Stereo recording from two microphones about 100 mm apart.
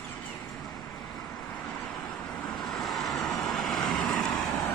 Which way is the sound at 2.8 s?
Centre (ahead or behind).